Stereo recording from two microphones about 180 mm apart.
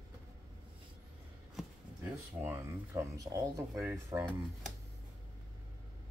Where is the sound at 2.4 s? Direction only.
15° right (ahead or behind).